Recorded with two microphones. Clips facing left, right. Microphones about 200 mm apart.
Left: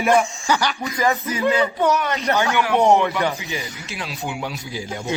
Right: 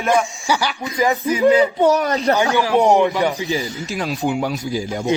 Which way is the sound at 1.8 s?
35° right (ahead or behind).